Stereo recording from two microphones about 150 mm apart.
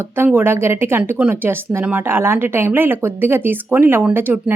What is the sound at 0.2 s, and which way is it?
Speech, 15° right (ahead or behind).